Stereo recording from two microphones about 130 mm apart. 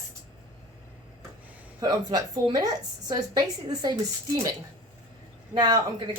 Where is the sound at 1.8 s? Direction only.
30° right (ahead or behind).